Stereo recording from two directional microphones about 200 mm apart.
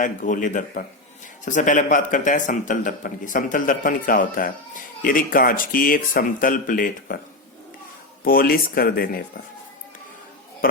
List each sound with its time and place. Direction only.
0.0 s a man's voice: 40° left (ahead or behind)
8.2 s a man's voice: 45° left (ahead or behind)